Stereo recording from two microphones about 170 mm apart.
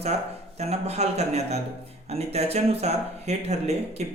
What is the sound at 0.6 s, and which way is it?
A man's voice, 40° right (ahead or behind).